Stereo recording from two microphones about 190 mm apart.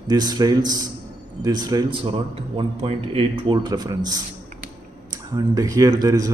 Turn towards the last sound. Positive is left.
turn(degrees=-20)  # may be behind; listen again after turning